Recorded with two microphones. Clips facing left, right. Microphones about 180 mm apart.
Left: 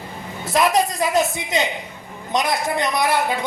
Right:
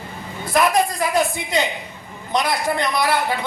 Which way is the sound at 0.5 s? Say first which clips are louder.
Even; 20° left (ahead or behind).